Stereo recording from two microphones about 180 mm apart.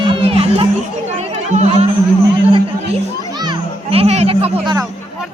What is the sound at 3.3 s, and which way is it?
Children playing, 25° right (ahead or behind).